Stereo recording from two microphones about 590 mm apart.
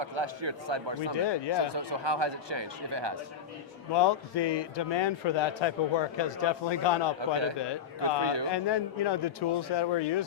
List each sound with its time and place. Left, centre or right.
0.0 s speech: right
1.1 s a man's voice: left
1.7 s speech: right
3.9 s a man's voice: left
8.2 s speech: right
8.4 s speech: left